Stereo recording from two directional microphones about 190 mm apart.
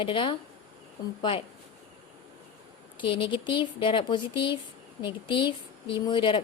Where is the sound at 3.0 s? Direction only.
25° left (ahead or behind).